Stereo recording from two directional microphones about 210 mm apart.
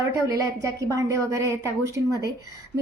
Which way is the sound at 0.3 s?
15° right (ahead or behind).